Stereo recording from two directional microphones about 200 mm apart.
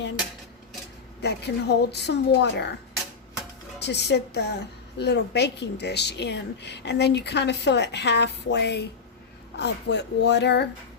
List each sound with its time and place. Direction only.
1.2 s speech: 55° left (ahead or behind)
3.8 s speech: 55° left (ahead or behind)